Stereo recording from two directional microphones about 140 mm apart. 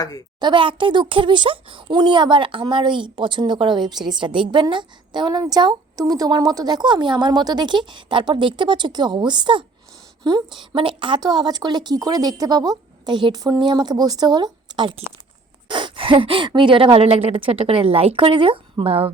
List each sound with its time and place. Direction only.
0.3 s a woman's voice: 35° right (ahead or behind)